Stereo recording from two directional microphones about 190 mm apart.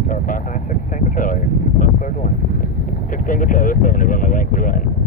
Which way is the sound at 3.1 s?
45° left (ahead or behind).